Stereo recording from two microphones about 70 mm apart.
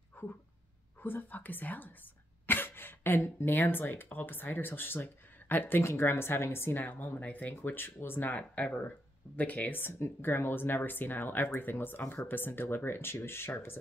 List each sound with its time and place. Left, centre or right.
0.2 s a sound: left
1.0 s speech: left
8.4 s speech: centre; by 13.7 s left